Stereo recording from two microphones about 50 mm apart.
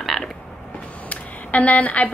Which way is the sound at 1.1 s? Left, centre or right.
Left.